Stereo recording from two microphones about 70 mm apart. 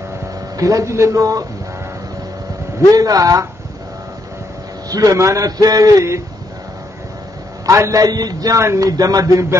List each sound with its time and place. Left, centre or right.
0.6 s speech: right
2.9 s a man's voice: right
4.8 s a man's voice: right
7.6 s a man's voice: right
8.5 s speech: right